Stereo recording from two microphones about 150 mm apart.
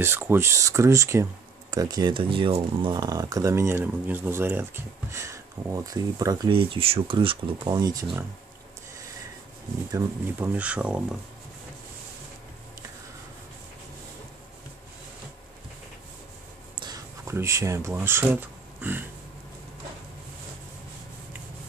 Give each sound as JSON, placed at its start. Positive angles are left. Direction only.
{"t": 0.0, "sound": "speech", "side_deg": -15}
{"t": 9.9, "sound": "speech", "side_deg": -15}
{"t": 16.8, "sound": "speech", "side_deg": -20}